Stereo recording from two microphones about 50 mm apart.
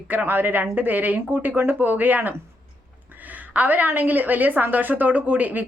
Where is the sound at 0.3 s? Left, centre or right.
Right.